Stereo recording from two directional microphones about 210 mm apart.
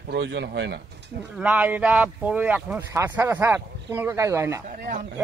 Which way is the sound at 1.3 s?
5° right (ahead or behind).